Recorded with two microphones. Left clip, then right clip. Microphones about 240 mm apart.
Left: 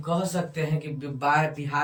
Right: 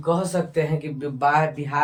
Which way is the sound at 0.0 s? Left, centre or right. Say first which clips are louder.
Right 5 dB; centre.